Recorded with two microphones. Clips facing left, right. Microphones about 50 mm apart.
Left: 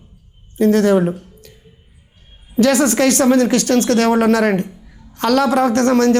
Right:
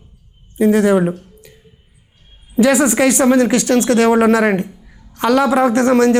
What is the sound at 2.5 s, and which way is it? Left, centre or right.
A man's voice, centre.